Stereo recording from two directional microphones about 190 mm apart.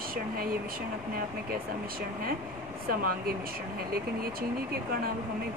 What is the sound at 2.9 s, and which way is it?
Speech, 50° right (ahead or behind).